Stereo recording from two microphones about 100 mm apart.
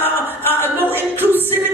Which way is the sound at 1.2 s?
20° right (ahead or behind).